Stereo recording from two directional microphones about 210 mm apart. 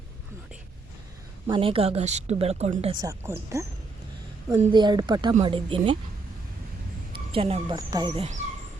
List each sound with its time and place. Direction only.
1.5 s speech: 25° right (ahead or behind)
2.9 s speech: 15° right (ahead or behind)
7.3 s speech: 25° right (ahead or behind)